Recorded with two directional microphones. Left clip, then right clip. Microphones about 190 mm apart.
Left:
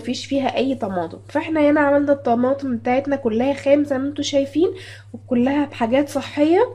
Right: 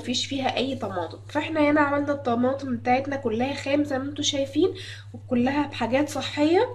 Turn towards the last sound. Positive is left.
turn(degrees=50)  # may be behind; listen again after turning